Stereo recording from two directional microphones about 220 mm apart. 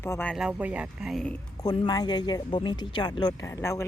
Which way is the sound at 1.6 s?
20° left (ahead or behind).